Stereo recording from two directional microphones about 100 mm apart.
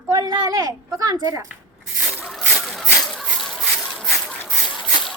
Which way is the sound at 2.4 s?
5° left (ahead or behind).